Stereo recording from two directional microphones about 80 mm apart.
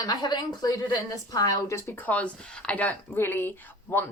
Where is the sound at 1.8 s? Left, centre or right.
Left.